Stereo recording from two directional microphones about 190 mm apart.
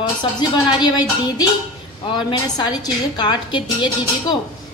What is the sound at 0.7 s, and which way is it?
A woman's voice, 20° left (ahead or behind).